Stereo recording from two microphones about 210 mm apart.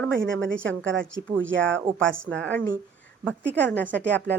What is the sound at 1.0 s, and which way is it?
Speech, 65° right (ahead or behind).